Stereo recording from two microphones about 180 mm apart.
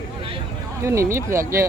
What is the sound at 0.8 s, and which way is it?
Speech, 15° right (ahead or behind).